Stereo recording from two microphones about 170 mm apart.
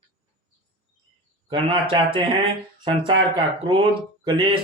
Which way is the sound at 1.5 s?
30° right (ahead or behind).